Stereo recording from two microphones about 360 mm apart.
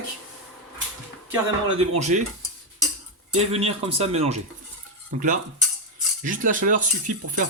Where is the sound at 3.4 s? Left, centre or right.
Centre.